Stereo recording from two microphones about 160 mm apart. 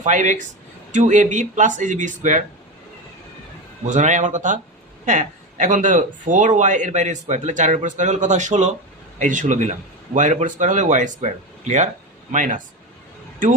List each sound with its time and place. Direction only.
0.0 s speech: 50° right (ahead or behind)
3.8 s speech: 50° right (ahead or behind)